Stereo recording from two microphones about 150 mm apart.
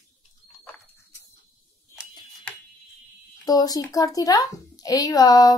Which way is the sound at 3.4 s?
25° left (ahead or behind).